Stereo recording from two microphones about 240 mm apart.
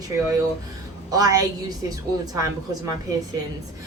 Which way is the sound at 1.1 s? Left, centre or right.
Centre.